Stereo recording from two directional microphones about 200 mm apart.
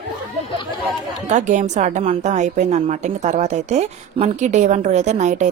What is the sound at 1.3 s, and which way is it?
A woman's voice, 35° right (ahead or behind).